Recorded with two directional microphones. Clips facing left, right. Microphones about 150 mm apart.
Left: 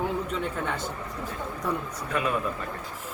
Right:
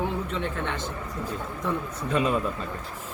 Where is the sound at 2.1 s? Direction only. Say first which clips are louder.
Right 3 dB; 25° right (ahead or behind).